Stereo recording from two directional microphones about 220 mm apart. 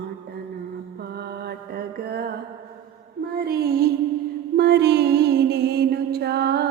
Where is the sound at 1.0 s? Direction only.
50° right (ahead or behind).